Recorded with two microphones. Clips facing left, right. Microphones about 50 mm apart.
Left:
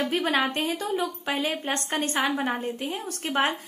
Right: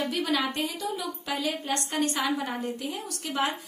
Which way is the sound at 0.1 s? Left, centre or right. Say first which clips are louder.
Left 3 dB; left.